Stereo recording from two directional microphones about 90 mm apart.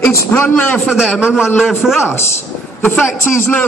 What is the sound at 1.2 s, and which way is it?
Speech, 10° right (ahead or behind).